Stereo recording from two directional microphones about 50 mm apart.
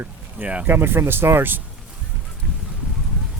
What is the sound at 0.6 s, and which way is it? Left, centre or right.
Speech, right.